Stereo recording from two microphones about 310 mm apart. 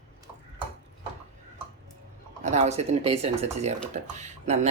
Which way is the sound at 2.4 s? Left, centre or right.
Right.